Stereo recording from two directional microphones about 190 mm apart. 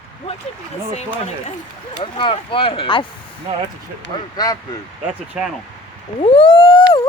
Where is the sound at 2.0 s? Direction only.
25° left (ahead or behind).